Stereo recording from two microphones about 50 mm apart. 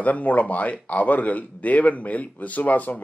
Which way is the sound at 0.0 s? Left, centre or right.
Left.